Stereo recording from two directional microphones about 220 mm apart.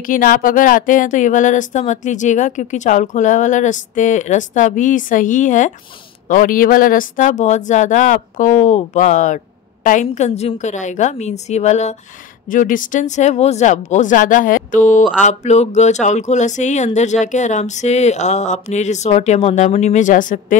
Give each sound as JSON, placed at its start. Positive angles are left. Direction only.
{"t": 0.0, "sound": "speech", "side_deg": 40}